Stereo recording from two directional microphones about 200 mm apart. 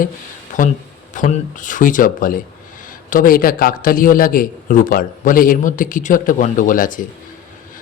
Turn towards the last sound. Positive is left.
turn(degrees=40)  # may be behind; listen again after turning